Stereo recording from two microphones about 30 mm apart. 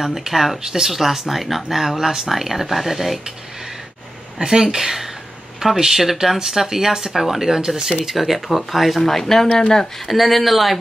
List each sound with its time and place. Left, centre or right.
0.0 s speech: centre
0.3 s speech: centre
0.6 s speech: centre
0.9 s speech: centre
4.5 s speech: centre
9.0 s speech: centre
9.9 s speech: centre